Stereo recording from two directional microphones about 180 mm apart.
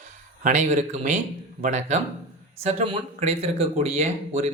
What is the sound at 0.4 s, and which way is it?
Speech, 40° right (ahead or behind).